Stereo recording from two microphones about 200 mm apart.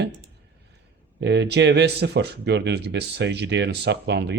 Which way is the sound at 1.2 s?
60° right (ahead or behind).